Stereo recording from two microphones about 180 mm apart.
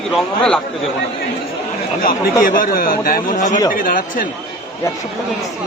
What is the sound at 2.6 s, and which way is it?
Speech, 50° left (ahead or behind).